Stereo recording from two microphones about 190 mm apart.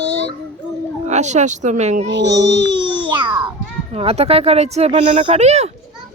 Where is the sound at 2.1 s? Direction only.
65° right (ahead or behind).